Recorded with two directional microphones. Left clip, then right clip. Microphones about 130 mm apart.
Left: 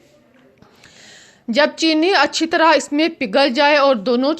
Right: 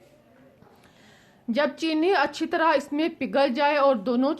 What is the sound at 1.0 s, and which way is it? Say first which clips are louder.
A woman's voice: left 5 dB; 25° left (ahead or behind).